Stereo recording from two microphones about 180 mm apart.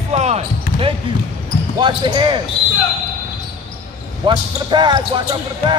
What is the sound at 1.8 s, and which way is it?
Speech, 25° right (ahead or behind).